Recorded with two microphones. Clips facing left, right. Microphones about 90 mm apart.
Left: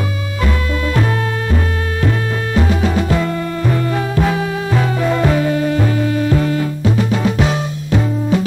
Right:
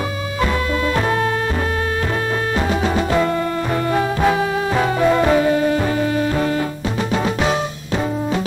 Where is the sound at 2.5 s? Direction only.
30° right (ahead or behind).